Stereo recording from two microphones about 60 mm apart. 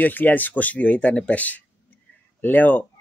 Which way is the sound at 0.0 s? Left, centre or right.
Left.